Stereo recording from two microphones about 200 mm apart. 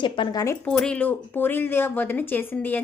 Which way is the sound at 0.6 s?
5° left (ahead or behind).